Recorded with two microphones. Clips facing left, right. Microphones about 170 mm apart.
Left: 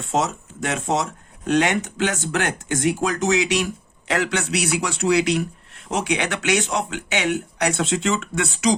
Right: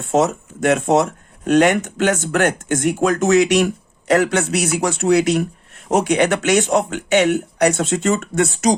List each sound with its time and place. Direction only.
0.0 s speech: 55° right (ahead or behind)